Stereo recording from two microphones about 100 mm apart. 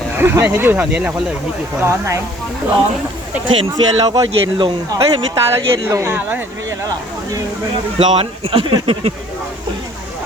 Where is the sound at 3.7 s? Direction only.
40° right (ahead or behind).